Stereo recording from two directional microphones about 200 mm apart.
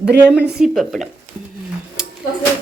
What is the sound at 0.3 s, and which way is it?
Speech, centre (ahead or behind).